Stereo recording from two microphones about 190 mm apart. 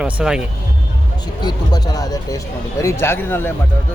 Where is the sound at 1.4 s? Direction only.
20° left (ahead or behind).